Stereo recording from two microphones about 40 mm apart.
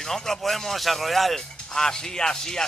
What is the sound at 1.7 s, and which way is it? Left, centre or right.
Speech, centre.